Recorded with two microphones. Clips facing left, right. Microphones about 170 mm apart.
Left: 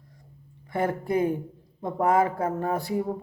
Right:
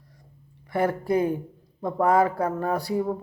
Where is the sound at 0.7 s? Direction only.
25° left (ahead or behind).